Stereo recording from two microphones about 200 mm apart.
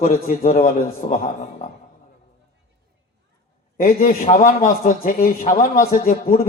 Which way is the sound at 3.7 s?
45° left (ahead or behind).